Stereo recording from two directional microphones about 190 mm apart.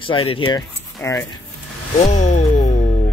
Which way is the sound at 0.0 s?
30° left (ahead or behind).